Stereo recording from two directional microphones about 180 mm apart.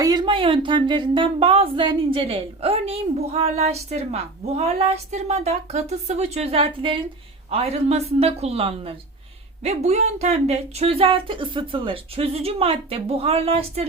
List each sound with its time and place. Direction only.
0.0 s speech: 25° right (ahead or behind)